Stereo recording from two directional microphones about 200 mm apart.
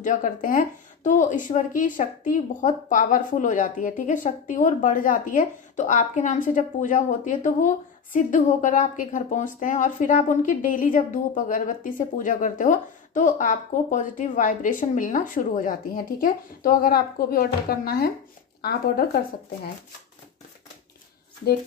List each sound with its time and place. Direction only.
0.0 s speech: 40° left (ahead or behind)